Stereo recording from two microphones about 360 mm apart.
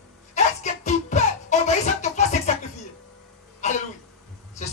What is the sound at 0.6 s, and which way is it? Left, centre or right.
Music, centre.